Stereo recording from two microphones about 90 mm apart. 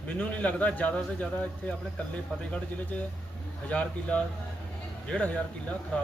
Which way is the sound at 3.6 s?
15° left (ahead or behind).